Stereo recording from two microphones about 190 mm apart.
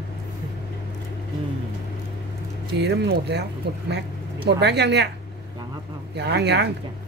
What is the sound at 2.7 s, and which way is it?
A woman's voice, 65° right (ahead or behind).